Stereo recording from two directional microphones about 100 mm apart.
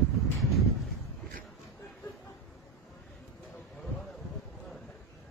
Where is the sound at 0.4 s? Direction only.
Centre (ahead or behind).